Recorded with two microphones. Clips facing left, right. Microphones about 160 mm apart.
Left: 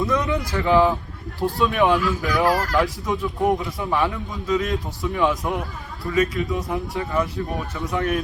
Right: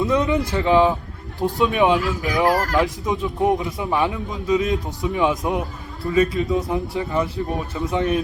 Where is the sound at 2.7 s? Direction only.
20° right (ahead or behind).